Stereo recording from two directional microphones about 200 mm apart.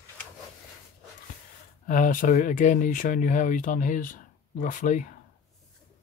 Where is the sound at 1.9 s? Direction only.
40° left (ahead or behind).